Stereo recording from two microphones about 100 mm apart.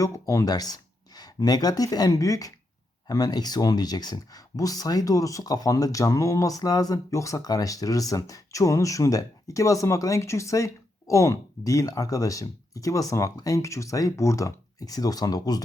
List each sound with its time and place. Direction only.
0.0 s speech: 35° left (ahead or behind)